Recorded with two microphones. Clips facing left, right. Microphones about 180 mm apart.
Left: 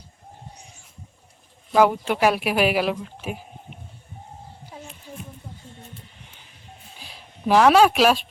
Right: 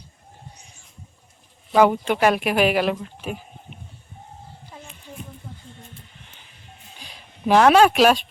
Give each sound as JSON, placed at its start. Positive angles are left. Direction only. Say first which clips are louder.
{"t": 1.7, "sound": "speech", "louder": "right 1 dB", "side_deg": 0}
{"t": 6.9, "sound": "speech", "louder": "even", "side_deg": 5}